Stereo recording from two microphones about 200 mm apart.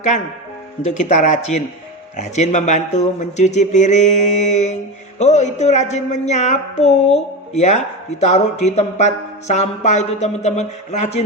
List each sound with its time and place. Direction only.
0.9 s speech: 35° left (ahead or behind)